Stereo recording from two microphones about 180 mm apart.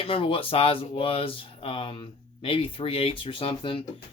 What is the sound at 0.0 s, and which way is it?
Speech, 30° left (ahead or behind).